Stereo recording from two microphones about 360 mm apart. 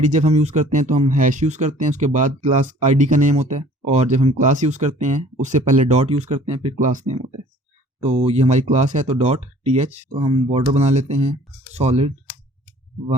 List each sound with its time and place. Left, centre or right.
0.0 s speech: centre